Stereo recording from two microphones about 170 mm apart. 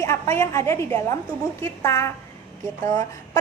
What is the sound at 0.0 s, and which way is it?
A woman's voice, 15° left (ahead or behind).